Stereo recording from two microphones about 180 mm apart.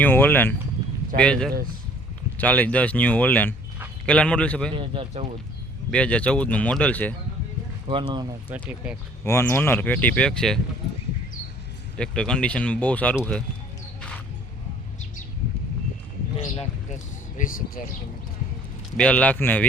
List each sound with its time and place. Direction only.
0.0 s speech: 10° left (ahead or behind)
4.7 s speech: 30° right (ahead or behind)
5.9 s speech: 5° left (ahead or behind)
7.9 s speech: 25° right (ahead or behind)
9.2 s speech: 15° left (ahead or behind)
11.9 s speech: 5° left (ahead or behind)
16.6 s speech: 45° left (ahead or behind)
18.9 s speech: 5° left (ahead or behind)